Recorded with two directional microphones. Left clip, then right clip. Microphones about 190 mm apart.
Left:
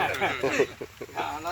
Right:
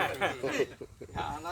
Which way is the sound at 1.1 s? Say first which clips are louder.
Left 5 dB; 25° left (ahead or behind).